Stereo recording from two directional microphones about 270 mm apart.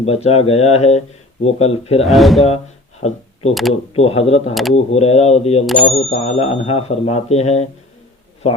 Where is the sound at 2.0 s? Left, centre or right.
Centre.